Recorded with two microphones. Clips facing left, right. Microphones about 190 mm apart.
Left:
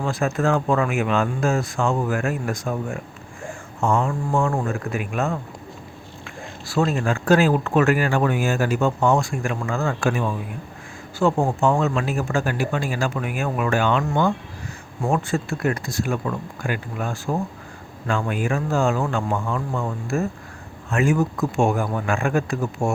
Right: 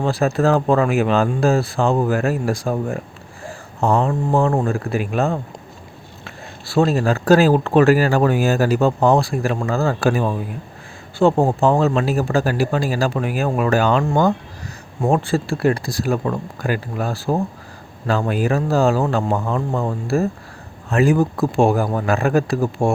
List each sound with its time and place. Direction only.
0.0 s speech: 35° right (ahead or behind)
6.7 s speech: 35° right (ahead or behind)